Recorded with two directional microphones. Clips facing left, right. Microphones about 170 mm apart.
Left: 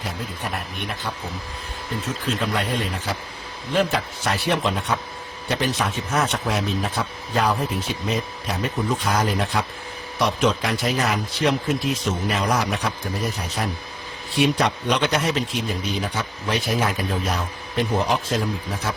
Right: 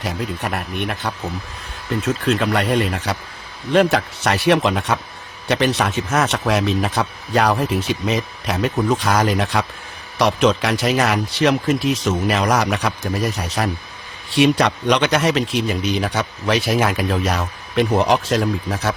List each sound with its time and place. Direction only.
0.0 s speech: 70° right (ahead or behind)